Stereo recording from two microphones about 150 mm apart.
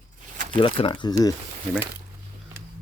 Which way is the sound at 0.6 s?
35° left (ahead or behind).